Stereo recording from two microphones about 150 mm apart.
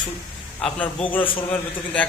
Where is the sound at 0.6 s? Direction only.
10° left (ahead or behind).